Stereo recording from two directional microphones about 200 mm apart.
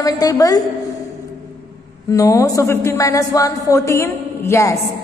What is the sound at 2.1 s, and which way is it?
A woman's voice, 15° left (ahead or behind).